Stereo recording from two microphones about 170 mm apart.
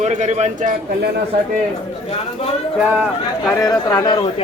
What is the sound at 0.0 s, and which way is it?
Speech, 40° right (ahead or behind).